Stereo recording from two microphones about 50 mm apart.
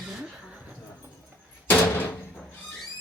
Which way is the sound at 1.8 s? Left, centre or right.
Left.